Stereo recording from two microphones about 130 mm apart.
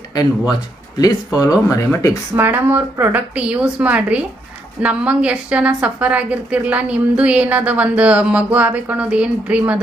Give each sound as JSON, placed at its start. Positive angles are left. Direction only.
{"t": 0.1, "sound": "speech", "side_deg": 30}
{"t": 1.6, "sound": "speech", "side_deg": 20}
{"t": 2.3, "sound": "a woman's voice", "side_deg": -15}